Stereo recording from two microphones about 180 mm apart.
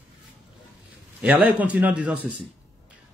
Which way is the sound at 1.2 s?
10° right (ahead or behind).